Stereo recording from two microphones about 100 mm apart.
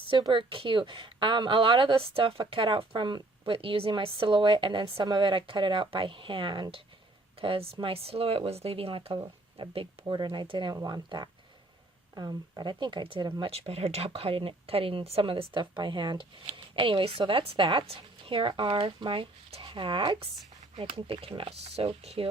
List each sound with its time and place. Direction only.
0.1 s a woman's voice: 50° right (ahead or behind)
10.7 s speech: 40° right (ahead or behind); by 13.3 s 60° right (ahead or behind)
13.4 s speech: 85° right; by 16.2 s 50° right (ahead or behind)
16.5 s a woman's voice: 60° right (ahead or behind)
19.6 s a woman's voice: 55° right (ahead or behind); by 22.3 s 75° right (ahead or behind)